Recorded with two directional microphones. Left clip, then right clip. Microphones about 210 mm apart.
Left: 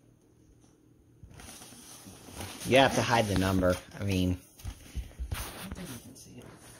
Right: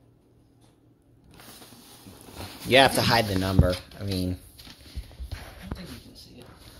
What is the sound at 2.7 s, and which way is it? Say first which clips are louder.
Speech: right 5 dB; centre (ahead or behind).